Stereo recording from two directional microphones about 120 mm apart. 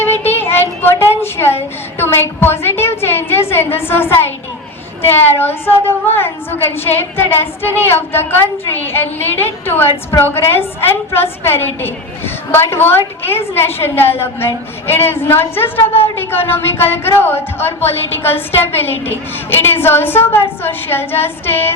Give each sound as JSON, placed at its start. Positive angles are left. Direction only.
{"t": 0.3, "sound": "child singing", "side_deg": 20}
{"t": 5.0, "sound": "a woman's voice", "side_deg": 20}